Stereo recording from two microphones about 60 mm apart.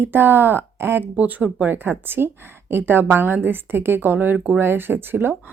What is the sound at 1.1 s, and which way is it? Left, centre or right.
Speech, right.